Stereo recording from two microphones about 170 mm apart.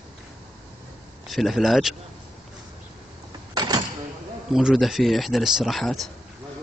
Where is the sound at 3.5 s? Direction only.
25° right (ahead or behind).